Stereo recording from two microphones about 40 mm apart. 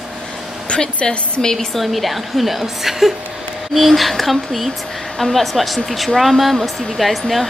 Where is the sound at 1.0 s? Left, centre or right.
Centre.